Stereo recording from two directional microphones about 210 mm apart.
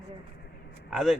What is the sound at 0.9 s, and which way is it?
Speech, centre (ahead or behind).